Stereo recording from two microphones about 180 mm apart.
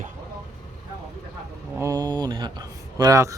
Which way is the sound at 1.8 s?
20° right (ahead or behind).